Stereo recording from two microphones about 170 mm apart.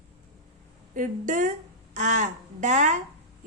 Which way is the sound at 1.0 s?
50° right (ahead or behind).